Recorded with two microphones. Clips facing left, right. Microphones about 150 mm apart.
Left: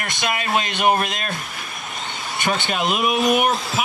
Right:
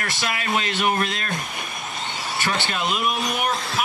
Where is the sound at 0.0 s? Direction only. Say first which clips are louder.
Left 3 dB; 20° left (ahead or behind).